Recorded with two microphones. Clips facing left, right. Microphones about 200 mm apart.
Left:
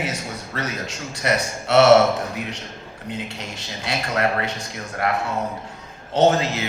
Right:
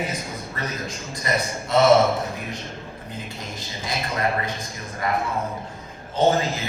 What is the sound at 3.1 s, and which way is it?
Speech, 75° left (ahead or behind).